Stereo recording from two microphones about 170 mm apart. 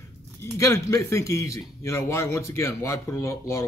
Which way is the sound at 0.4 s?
15° left (ahead or behind).